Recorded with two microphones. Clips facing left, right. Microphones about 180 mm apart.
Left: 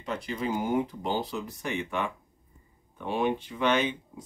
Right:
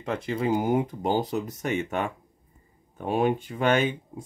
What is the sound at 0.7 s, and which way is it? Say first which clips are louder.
Speech: right 4 dB; 45° right (ahead or behind).